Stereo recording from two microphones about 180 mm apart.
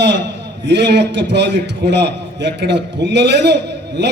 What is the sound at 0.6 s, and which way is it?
A man's voice, 75° right (ahead or behind).